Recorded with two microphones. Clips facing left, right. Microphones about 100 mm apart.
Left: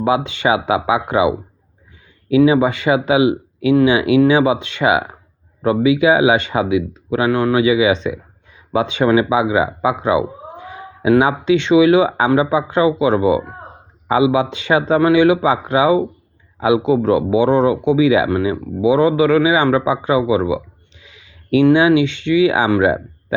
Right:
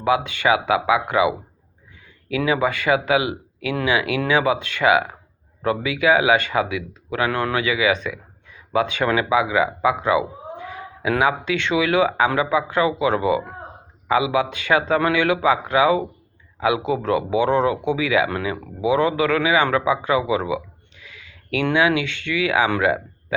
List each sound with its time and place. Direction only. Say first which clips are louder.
0.0 s speech: left 3 dB; 25° left (ahead or behind)